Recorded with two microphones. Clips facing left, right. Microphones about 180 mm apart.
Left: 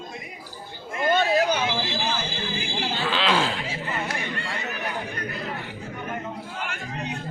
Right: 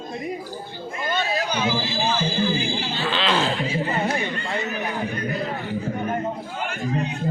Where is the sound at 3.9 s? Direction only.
35° right (ahead or behind).